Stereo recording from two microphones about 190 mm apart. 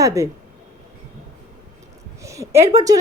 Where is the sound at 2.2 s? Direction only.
15° right (ahead or behind).